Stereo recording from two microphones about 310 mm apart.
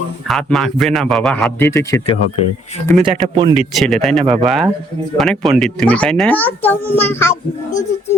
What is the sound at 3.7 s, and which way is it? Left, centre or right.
Speech, centre.